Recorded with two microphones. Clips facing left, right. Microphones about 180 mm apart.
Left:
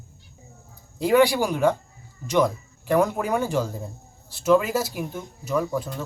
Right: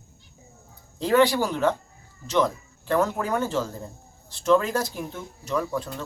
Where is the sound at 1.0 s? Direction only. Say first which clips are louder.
Left 2 dB; 10° left (ahead or behind).